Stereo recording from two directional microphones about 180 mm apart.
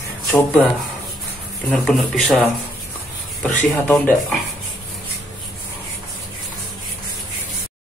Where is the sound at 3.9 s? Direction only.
5° left (ahead or behind).